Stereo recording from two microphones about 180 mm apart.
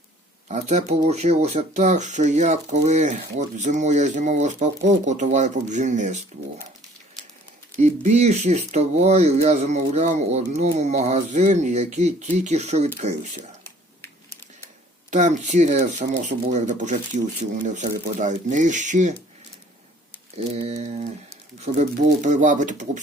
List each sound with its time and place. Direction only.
0.4 s speech: 40° right (ahead or behind)
7.8 s speech: 40° right (ahead or behind)
15.1 s speech: 45° right (ahead or behind)
20.7 s speech: 40° right (ahead or behind)